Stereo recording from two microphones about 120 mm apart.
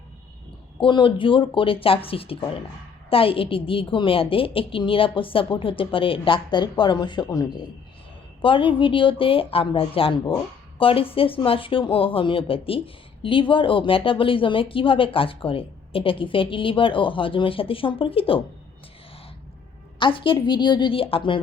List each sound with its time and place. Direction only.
0.8 s speech: 45° left (ahead or behind)
8.4 s speech: 45° left (ahead or behind)
20.0 s speech: 45° left (ahead or behind)